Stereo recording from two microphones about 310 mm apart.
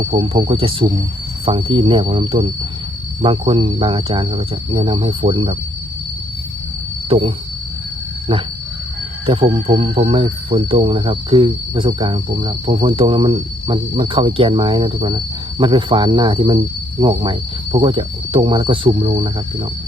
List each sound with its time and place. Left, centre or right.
0.0 s speech: centre
7.1 s speech: centre